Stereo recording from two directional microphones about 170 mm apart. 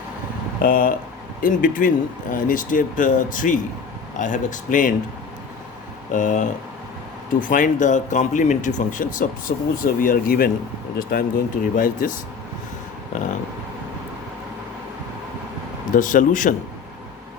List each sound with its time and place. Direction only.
0.6 s speech: 55° left (ahead or behind)
6.1 s speech: 50° left (ahead or behind)
15.9 s speech: 50° left (ahead or behind)